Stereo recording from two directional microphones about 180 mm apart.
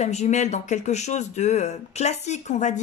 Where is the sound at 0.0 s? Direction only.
40° left (ahead or behind).